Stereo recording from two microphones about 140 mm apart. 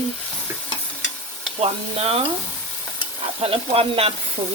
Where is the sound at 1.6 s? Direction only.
45° right (ahead or behind).